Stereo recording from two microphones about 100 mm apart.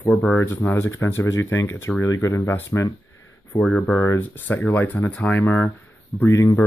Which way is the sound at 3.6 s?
5° left (ahead or behind).